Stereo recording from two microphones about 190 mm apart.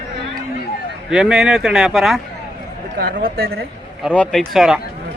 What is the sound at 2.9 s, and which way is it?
Speech, 50° right (ahead or behind).